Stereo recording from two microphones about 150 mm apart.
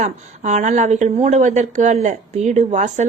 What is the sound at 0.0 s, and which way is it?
Speech, 50° right (ahead or behind).